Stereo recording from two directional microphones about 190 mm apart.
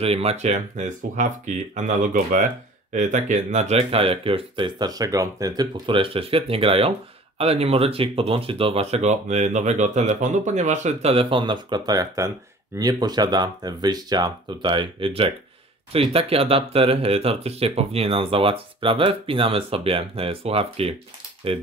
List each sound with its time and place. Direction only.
0.0 s speech: 30° right (ahead or behind)